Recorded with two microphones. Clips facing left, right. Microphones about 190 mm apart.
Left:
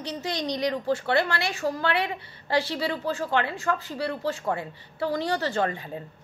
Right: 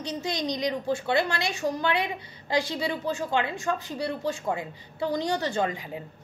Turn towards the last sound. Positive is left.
turn(degrees=-15)  # may be behind; listen again after turning